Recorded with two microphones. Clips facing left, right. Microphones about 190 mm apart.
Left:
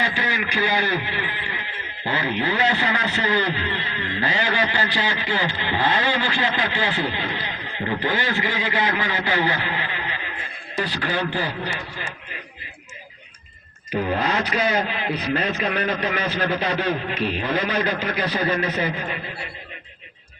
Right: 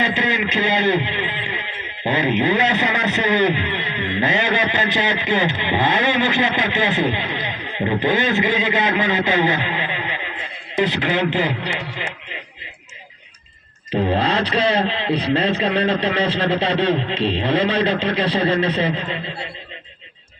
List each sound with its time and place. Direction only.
0.0 s a man's voice: 20° right (ahead or behind)
13.9 s a man's voice: 30° right (ahead or behind)